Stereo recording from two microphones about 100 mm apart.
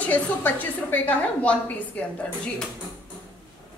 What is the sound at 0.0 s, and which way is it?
A woman's voice, 20° left (ahead or behind).